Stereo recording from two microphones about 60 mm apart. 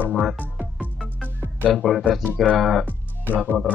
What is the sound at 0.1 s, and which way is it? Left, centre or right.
Speech, centre.